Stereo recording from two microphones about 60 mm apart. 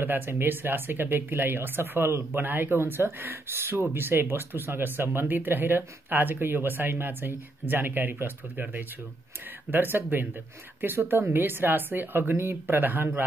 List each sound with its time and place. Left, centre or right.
0.0 s speech: right